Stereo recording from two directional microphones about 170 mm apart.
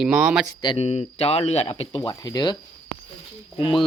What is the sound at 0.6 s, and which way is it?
Speech, 35° left (ahead or behind).